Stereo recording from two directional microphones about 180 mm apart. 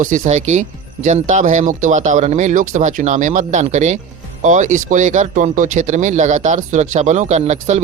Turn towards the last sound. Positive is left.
turn(degrees=-40)  # may be behind; listen again after turning